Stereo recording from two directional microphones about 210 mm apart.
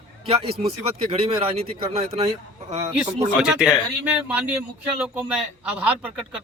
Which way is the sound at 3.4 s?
5° right (ahead or behind).